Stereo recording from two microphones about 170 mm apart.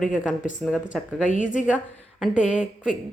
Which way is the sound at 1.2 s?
50° left (ahead or behind).